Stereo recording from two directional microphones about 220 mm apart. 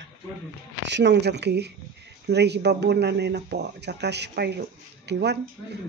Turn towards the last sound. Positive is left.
turn(degrees=-50)  # may be behind; listen again after turning